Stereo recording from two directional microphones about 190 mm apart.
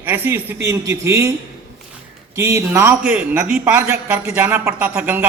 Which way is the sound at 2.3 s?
15° right (ahead or behind).